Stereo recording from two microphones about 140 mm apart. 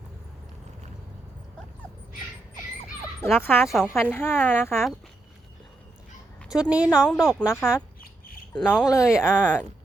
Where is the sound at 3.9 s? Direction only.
15° left (ahead or behind).